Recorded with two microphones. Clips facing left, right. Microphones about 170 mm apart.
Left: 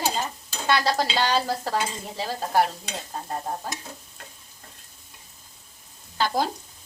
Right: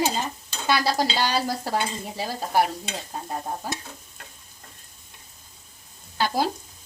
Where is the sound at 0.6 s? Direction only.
10° right (ahead or behind).